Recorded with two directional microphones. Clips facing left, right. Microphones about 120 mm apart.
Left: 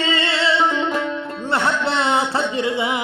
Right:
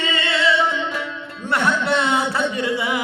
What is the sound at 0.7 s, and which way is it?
Music, 40° left (ahead or behind).